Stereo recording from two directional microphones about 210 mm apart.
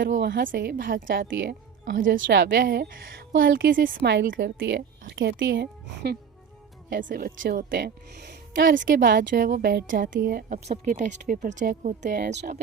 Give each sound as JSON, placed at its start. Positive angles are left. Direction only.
{"t": 0.0, "sound": "speech", "side_deg": -45}
{"t": 1.3, "sound": "speech", "side_deg": -60}
{"t": 1.8, "sound": "speech", "side_deg": -40}
{"t": 2.1, "sound": "speech", "side_deg": -60}
{"t": 7.1, "sound": "speech", "side_deg": -40}